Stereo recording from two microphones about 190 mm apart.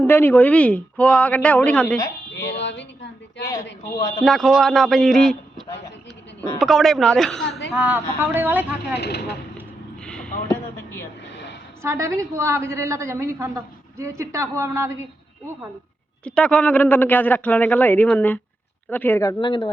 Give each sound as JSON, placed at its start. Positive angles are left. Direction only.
{"t": 0.1, "sound": "speech", "side_deg": 10}
{"t": 2.6, "sound": "a sound", "side_deg": 70}
{"t": 4.2, "sound": "speech", "side_deg": 0}
{"t": 6.6, "sound": "a woman's voice", "side_deg": 0}
{"t": 9.0, "sound": "speech", "side_deg": 60}
{"t": 10.0, "sound": "a sound", "side_deg": 5}
{"t": 11.8, "sound": "a woman's voice", "side_deg": -15}
{"t": 16.2, "sound": "speech", "side_deg": 5}